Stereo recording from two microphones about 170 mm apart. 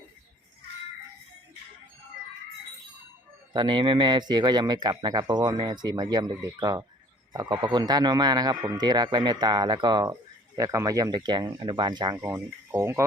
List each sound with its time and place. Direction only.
3.5 s speech: 30° right (ahead or behind)
12.2 s speech: 15° right (ahead or behind)